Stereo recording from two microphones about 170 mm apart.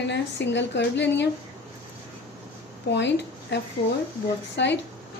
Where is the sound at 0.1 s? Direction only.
90° left.